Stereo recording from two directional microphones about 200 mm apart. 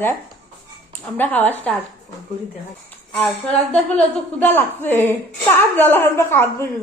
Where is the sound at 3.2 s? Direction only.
5° left (ahead or behind).